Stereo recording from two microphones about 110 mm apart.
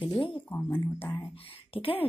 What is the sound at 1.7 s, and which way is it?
Speech, 55° left (ahead or behind).